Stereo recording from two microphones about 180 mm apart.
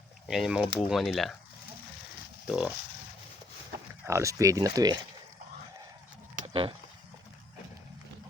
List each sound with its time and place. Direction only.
0.3 s speech: 5° right (ahead or behind)
2.5 s speech: 5° right (ahead or behind)
4.0 s speech: 15° right (ahead or behind)
6.4 s a sound: 30° right (ahead or behind)